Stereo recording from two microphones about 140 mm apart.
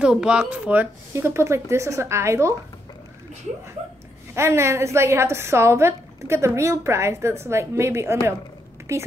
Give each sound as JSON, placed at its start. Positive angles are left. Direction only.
{"t": 0.0, "sound": "a woman's voice", "side_deg": -5}
{"t": 4.4, "sound": "a woman's voice", "side_deg": -20}